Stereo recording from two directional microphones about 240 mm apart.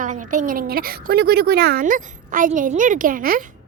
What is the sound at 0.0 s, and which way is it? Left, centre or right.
A child's voice, right.